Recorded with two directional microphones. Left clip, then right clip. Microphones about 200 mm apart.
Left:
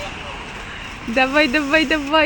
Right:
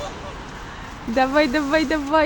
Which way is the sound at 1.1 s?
Centre (ahead or behind).